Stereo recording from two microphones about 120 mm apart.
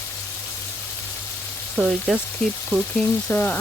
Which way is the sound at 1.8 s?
5° right (ahead or behind).